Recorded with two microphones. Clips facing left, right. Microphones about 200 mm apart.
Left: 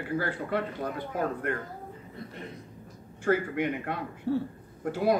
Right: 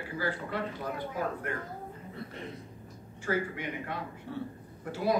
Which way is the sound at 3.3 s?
55° left (ahead or behind).